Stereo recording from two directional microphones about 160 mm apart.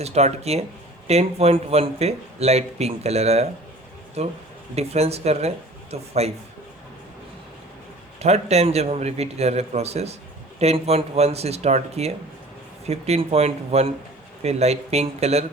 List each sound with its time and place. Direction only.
0.0 s speech: 45° right (ahead or behind)
4.7 s speech: 40° right (ahead or behind)
8.2 s speech: 40° right (ahead or behind)